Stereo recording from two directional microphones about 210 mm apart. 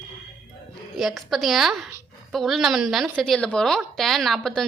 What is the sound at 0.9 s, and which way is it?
A woman's voice, centre (ahead or behind).